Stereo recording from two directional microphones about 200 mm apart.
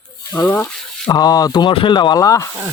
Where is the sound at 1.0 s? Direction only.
20° left (ahead or behind).